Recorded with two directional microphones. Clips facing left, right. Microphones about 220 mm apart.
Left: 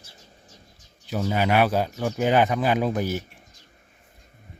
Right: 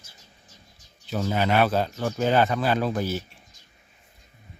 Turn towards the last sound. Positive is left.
turn(degrees=15)  # may be behind; listen again after turning